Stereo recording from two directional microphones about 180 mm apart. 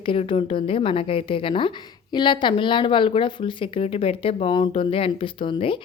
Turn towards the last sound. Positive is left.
turn(degrees=30)  # may be behind; listen again after turning